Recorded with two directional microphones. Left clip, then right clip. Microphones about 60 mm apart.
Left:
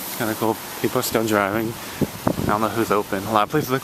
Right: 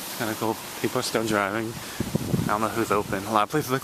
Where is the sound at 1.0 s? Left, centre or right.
Left.